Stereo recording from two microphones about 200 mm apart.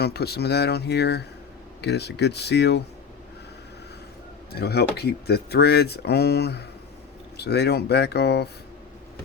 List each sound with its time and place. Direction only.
0.0 s speech: 55° left (ahead or behind)
4.5 s speech: 55° left (ahead or behind)